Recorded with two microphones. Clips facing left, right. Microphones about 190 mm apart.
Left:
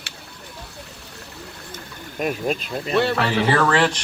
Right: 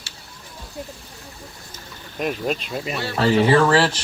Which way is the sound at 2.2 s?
5° left (ahead or behind).